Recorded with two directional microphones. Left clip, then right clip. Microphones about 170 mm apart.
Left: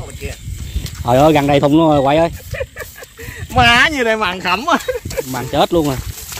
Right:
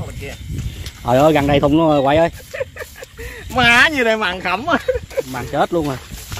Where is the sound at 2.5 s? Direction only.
20° left (ahead or behind).